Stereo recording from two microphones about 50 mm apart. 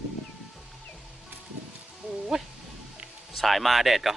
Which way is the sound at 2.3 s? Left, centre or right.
Centre.